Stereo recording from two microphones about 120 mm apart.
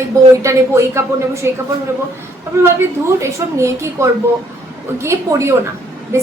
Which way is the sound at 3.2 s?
25° right (ahead or behind).